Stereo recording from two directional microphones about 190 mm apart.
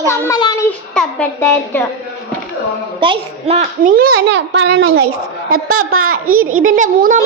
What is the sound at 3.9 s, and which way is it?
A child's voice, 55° right (ahead or behind).